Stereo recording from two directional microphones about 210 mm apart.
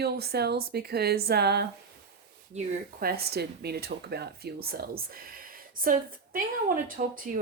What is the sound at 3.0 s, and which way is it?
Speech, 45° right (ahead or behind).